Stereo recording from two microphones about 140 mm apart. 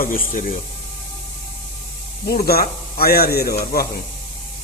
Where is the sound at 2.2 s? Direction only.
90° left.